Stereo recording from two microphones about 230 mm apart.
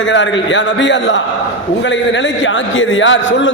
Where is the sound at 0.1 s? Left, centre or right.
Left.